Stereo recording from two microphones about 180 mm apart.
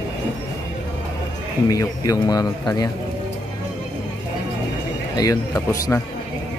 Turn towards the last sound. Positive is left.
turn(degrees=20)  # may be behind; listen again after turning